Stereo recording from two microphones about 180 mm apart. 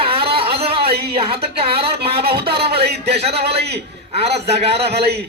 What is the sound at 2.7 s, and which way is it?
A man's voice, 35° right (ahead or behind).